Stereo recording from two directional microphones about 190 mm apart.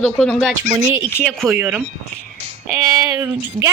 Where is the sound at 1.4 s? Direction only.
5° right (ahead or behind).